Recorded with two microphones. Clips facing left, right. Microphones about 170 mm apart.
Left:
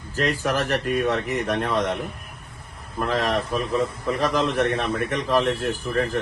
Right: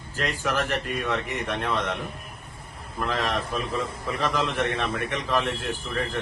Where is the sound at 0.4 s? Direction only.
45° left (ahead or behind).